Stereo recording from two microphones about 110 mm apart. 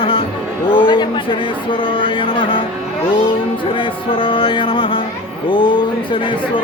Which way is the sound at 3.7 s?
50° left (ahead or behind).